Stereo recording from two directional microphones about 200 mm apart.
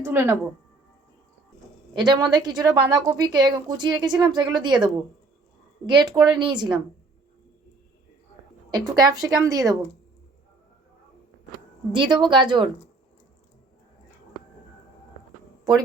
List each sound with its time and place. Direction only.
0.0 s speech: 10° right (ahead or behind)
2.0 s a woman's voice: 20° right (ahead or behind)
9.0 s speech: 20° right (ahead or behind)
11.9 s a woman's voice: 25° right (ahead or behind)